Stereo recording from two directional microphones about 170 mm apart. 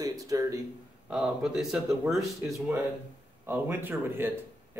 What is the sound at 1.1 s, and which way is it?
Speech, 5° right (ahead or behind).